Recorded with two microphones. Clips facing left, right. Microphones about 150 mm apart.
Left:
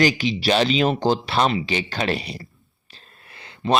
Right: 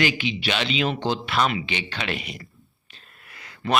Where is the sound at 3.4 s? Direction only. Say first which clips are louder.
Left 4 dB; 25° left (ahead or behind).